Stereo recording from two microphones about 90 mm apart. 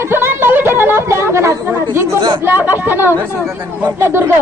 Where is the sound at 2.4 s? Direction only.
25° right (ahead or behind).